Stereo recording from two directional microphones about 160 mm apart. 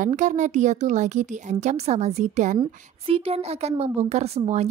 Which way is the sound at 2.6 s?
35° right (ahead or behind).